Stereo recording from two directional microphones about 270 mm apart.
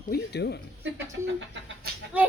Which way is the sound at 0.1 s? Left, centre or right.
Left.